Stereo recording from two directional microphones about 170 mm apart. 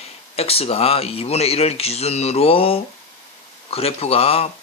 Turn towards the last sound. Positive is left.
turn(degrees=35)  # may be behind; listen again after turning